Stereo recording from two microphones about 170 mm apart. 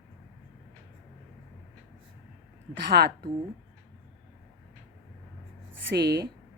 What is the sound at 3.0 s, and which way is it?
Speech, 70° right (ahead or behind).